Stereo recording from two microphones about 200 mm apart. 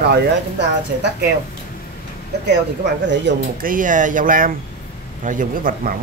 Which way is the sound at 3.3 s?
60° right (ahead or behind).